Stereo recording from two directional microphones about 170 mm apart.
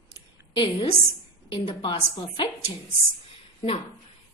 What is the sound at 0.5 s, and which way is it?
A woman's voice, 30° left (ahead or behind).